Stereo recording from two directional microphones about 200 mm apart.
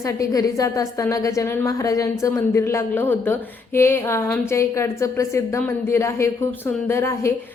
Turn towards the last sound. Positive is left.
turn(degrees=15)  # may be behind; listen again after turning